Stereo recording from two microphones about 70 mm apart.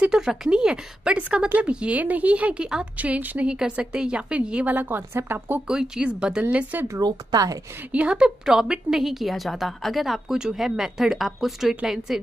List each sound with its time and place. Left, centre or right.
0.0 s a woman's voice: centre; by 5.6 s right
5.7 s a woman's voice: centre
6.5 s a woman's voice: right
7.0 s speech: right
7.9 s a woman's voice: centre